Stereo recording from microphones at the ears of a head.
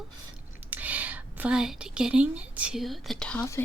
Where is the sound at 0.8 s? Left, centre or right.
Right.